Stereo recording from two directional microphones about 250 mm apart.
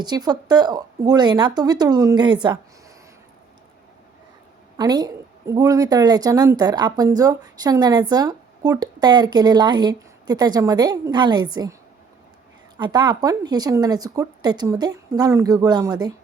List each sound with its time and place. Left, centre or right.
0.0 s a woman's voice: centre
4.8 s a woman's voice: centre
12.7 s a woman's voice: centre